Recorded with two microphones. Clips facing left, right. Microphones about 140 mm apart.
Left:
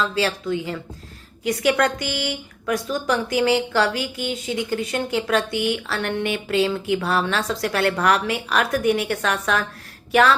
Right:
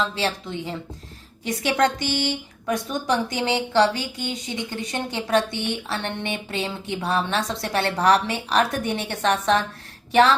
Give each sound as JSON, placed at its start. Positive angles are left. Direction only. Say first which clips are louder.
{"t": 0.0, "sound": "a woman's voice", "louder": "left 3 dB", "side_deg": -25}